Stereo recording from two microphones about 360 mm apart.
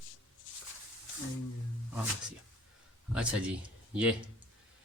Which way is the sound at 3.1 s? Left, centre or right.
Centre.